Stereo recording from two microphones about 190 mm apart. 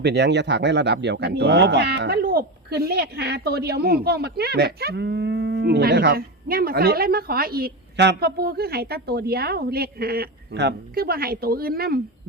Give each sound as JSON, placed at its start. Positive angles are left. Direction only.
{"t": 0.0, "sound": "a man's voice", "side_deg": -60}